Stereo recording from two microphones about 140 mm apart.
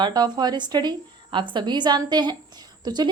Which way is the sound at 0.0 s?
30° right (ahead or behind).